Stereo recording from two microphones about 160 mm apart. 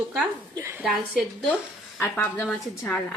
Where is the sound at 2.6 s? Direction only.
5° left (ahead or behind).